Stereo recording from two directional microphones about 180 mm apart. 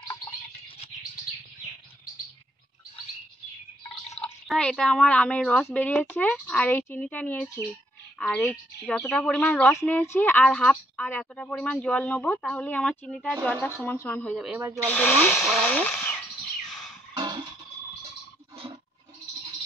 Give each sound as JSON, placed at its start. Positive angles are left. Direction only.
{"t": 4.2, "sound": "speech", "side_deg": 5}
{"t": 16.6, "sound": "music", "side_deg": 0}
{"t": 17.1, "sound": "a sound", "side_deg": -25}